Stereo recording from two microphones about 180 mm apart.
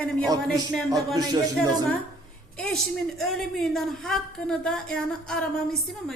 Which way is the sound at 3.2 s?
Centre (ahead or behind).